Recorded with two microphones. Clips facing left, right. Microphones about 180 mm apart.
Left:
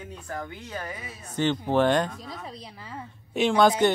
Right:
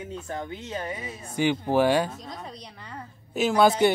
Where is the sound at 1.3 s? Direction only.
10° right (ahead or behind).